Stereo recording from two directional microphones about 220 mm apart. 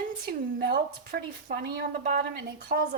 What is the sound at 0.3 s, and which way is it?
A woman's voice, 40° right (ahead or behind).